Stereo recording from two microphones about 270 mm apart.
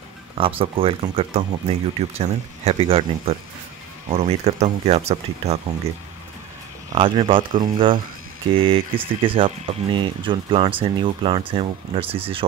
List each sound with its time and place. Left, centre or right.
0.4 s speech: centre
7.0 s speech: centre